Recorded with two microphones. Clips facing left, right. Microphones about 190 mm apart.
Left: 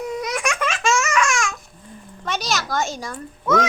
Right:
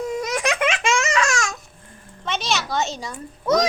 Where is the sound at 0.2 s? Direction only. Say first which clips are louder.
Right 1 dB; 45° right (ahead or behind).